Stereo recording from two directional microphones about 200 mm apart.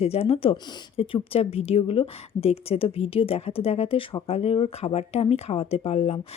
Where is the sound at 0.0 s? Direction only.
30° left (ahead or behind).